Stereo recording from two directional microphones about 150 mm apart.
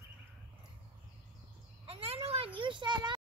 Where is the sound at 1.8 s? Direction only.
40° right (ahead or behind).